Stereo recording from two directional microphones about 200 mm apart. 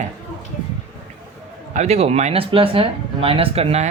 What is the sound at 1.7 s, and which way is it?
Speech, 35° right (ahead or behind).